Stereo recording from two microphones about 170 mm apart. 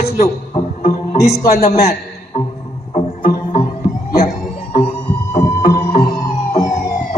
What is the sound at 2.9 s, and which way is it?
Music, 50° left (ahead or behind).